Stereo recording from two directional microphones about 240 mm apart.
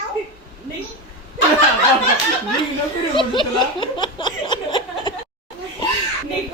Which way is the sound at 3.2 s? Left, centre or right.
Centre.